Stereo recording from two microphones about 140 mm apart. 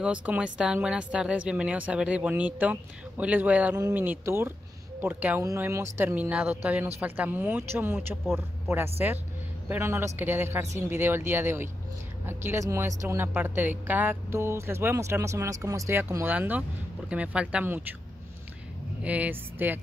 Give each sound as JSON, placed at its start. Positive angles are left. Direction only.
{"t": 0.0, "sound": "speech", "side_deg": -10}
{"t": 5.4, "sound": "speech", "side_deg": -20}
{"t": 19.0, "sound": "speech", "side_deg": -10}